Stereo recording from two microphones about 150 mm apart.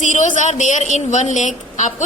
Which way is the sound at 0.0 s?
55° left (ahead or behind).